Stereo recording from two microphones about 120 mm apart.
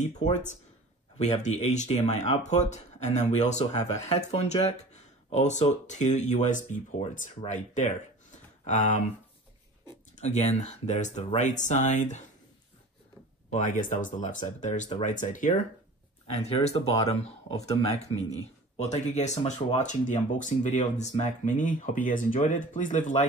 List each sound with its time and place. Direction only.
0.0 s speech: 85° left
1.1 s speech: 70° left (ahead or behind); by 9.0 s 90° left
10.1 s speech: 70° left (ahead or behind); by 12.2 s 90° left
13.5 s speech: 90° left
16.3 s speech: 60° left (ahead or behind)
18.8 s speech: 75° left (ahead or behind)